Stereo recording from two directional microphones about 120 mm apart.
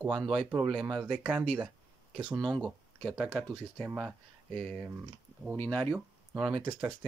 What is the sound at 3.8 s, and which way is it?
Speech, 10° right (ahead or behind).